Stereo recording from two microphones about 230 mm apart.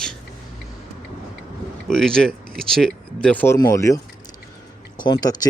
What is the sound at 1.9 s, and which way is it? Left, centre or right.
Speech, centre.